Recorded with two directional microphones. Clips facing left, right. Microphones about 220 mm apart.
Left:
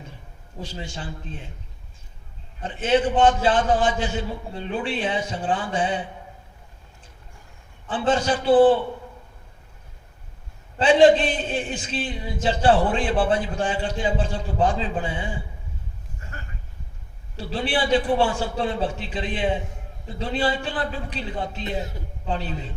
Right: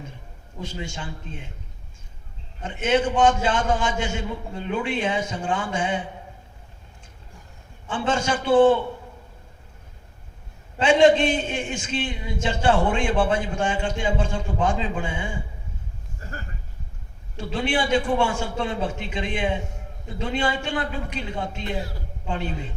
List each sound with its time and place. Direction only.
0.6 s speech: 35° left (ahead or behind)
2.6 s speech: 30° left (ahead or behind)
7.9 s speech: 35° left (ahead or behind)
10.8 s speech: 35° left (ahead or behind)
16.2 s a sound: 35° right (ahead or behind)
17.3 s speech: 35° left (ahead or behind)